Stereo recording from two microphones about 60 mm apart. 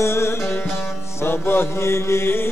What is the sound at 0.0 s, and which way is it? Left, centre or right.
Music, left.